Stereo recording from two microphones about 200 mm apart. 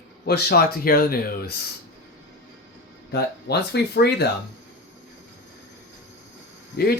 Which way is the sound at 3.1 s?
55° left (ahead or behind).